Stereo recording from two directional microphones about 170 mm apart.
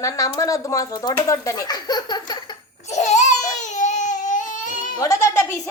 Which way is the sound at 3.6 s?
45° left (ahead or behind).